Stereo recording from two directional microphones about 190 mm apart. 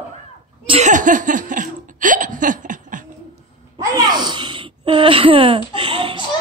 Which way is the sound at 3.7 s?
20° right (ahead or behind).